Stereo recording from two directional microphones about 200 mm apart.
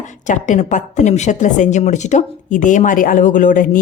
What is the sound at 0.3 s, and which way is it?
A woman's voice, 40° left (ahead or behind).